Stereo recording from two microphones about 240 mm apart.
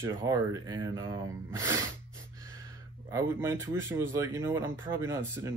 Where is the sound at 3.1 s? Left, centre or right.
Centre.